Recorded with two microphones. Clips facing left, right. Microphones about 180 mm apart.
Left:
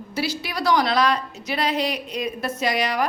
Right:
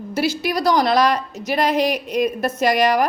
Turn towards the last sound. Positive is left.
turn(degrees=-50)  # may be behind; listen again after turning